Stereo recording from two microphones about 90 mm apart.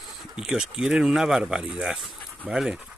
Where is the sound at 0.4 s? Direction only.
5° right (ahead or behind).